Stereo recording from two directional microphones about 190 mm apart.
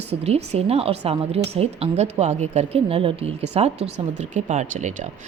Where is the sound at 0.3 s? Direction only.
35° right (ahead or behind).